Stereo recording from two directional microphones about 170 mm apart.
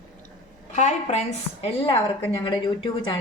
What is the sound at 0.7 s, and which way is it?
A woman's voice, 40° left (ahead or behind).